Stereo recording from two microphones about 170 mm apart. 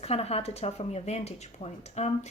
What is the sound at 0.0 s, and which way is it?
A woman's voice, 35° left (ahead or behind).